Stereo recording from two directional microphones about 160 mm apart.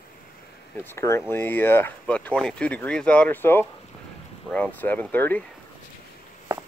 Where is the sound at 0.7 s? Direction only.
15° left (ahead or behind).